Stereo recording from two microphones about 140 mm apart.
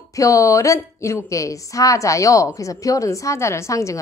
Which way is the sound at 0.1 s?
25° left (ahead or behind).